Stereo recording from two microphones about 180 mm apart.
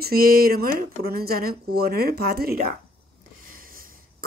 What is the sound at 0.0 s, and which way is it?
Speech, 55° right (ahead or behind).